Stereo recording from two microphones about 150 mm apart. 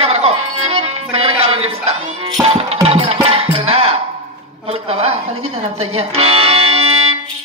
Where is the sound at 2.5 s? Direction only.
40° right (ahead or behind).